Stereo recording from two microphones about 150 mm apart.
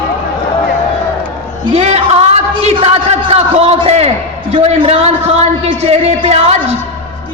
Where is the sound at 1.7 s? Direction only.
45° right (ahead or behind).